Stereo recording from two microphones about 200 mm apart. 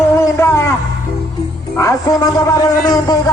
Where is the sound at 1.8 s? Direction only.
15° left (ahead or behind).